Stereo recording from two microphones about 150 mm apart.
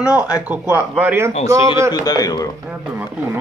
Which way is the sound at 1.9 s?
25° left (ahead or behind).